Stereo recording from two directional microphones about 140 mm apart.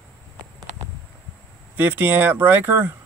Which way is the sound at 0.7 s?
55° right (ahead or behind).